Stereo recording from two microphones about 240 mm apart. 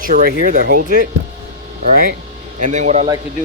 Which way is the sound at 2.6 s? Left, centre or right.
Right.